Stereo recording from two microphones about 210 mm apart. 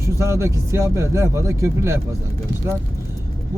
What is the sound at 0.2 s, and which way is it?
Speech, 15° right (ahead or behind).